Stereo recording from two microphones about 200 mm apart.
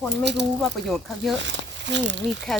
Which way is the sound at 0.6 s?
Centre (ahead or behind).